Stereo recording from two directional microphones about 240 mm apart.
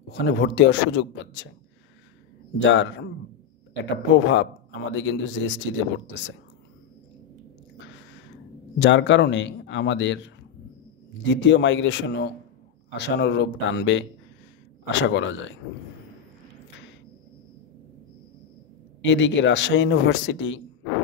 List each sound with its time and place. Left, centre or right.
0.1 s a man's voice: left
2.6 s a man's voice: left
8.7 s a man's voice: left
18.9 s a man's voice: left